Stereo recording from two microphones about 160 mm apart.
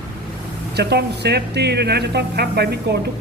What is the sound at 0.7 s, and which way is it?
Speech, 90° right.